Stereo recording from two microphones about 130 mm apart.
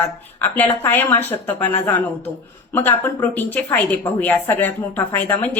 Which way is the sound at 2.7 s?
15° left (ahead or behind).